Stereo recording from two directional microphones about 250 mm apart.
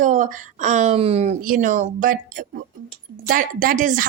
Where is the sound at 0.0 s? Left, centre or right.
Right.